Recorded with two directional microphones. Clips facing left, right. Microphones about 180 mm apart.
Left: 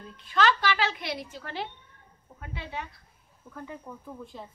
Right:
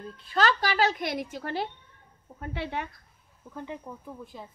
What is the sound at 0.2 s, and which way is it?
A woman's voice, 40° right (ahead or behind).